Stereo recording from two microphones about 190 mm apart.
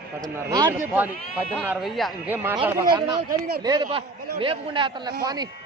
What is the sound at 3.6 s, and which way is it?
A man's voice, 20° right (ahead or behind).